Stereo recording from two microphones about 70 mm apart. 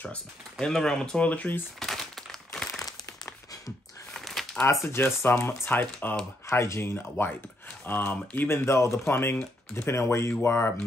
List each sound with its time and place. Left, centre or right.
0.0 s speech: centre
1.8 s crumpling: centre
2.8 s a sound: left
4.1 s a sound: centre
4.8 s speech: left
6.5 s speech: left
8.5 s speech: left